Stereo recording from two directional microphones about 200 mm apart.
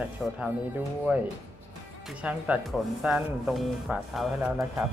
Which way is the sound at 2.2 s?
5° right (ahead or behind).